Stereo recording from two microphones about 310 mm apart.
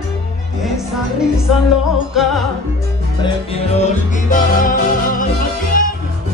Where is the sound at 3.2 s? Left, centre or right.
Centre.